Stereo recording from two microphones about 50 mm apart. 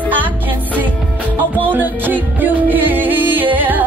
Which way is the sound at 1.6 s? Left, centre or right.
Right.